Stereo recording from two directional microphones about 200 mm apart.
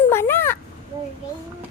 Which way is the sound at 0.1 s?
10° left (ahead or behind).